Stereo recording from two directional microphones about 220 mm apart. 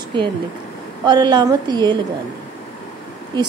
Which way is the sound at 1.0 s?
20° right (ahead or behind).